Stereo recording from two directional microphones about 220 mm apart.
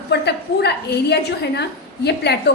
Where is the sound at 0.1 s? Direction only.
50° left (ahead or behind).